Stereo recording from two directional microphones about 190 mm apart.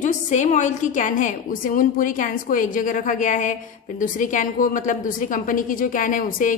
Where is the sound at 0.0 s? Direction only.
40° left (ahead or behind).